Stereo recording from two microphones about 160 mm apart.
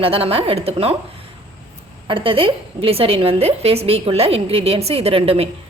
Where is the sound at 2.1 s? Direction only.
35° right (ahead or behind).